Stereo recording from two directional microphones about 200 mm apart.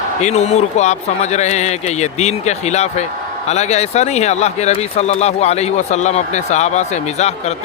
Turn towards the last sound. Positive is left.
turn(degrees=35)  # may be behind; listen again after turning